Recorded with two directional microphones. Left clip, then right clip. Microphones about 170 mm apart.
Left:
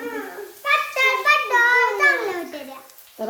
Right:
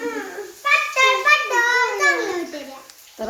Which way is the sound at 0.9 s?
40° right (ahead or behind).